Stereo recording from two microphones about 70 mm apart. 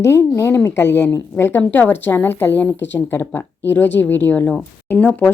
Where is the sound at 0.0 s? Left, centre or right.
Left.